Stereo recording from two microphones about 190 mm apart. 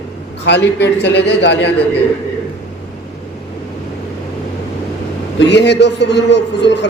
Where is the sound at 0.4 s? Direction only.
65° left (ahead or behind).